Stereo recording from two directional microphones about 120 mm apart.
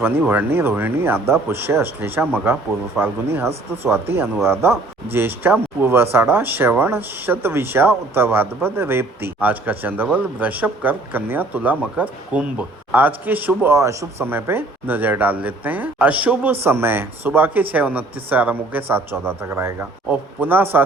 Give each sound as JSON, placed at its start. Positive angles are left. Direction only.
{"t": 0.0, "sound": "a man's voice", "side_deg": -15}